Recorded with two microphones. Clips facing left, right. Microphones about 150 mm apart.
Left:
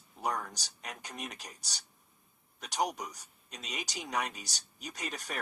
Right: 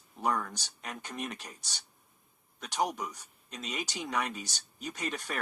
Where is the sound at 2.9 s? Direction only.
35° left (ahead or behind).